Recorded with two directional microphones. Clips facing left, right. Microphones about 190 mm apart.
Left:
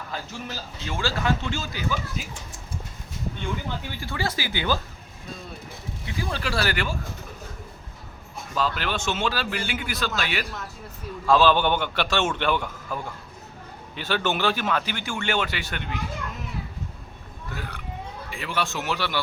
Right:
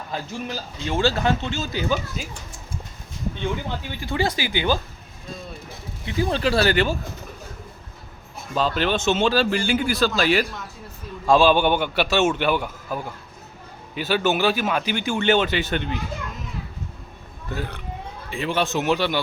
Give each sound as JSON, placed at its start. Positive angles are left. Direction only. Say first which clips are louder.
{"t": 0.1, "sound": "speech", "louder": "right 6 dB", "side_deg": -25}
{"t": 4.0, "sound": "speech", "louder": "right 6 dB", "side_deg": -15}
{"t": 6.1, "sound": "speech", "louder": "right 8 dB", "side_deg": -25}
{"t": 8.5, "sound": "speech", "louder": "right 5 dB", "side_deg": -25}
{"t": 11.3, "sound": "speech", "louder": "right 3 dB", "side_deg": -10}
{"t": 17.5, "sound": "speech", "louder": "right 6 dB", "side_deg": -25}